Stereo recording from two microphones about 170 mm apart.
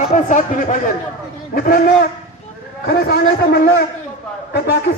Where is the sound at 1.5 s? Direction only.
55° left (ahead or behind).